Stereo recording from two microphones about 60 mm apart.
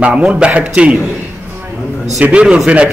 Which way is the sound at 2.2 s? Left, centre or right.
Centre.